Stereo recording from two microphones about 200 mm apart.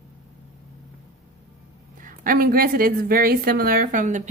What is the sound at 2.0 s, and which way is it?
A woman's voice, 45° right (ahead or behind).